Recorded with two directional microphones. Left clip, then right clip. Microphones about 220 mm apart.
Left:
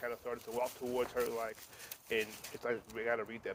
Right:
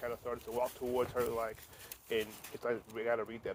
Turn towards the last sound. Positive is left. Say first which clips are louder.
# right 1 dB
turn(degrees=-20)  # may be behind; listen again after turning